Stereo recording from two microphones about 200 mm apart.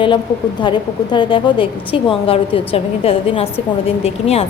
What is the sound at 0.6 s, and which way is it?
A woman's voice, 25° left (ahead or behind).